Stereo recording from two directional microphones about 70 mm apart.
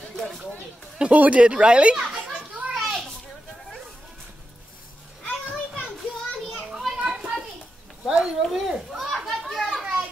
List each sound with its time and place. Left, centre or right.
0.9 s speech: centre
2.7 s children playing: centre
6.7 s children playing: centre
8.1 s speech: centre
8.4 s children playing: centre